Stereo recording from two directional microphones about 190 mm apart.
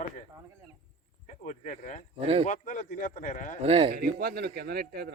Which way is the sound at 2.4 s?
40° left (ahead or behind).